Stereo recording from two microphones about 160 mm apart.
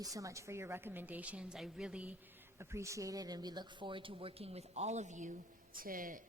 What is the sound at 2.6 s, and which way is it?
A man's voice, 20° right (ahead or behind).